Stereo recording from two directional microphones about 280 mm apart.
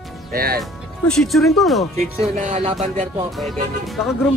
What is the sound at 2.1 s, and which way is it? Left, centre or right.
Music, right.